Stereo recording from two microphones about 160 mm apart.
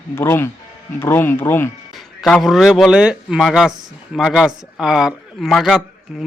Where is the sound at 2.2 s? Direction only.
Centre (ahead or behind).